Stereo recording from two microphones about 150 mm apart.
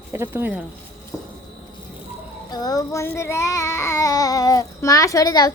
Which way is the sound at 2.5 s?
25° left (ahead or behind).